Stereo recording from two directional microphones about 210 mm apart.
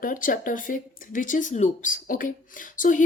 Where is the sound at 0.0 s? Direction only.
40° left (ahead or behind).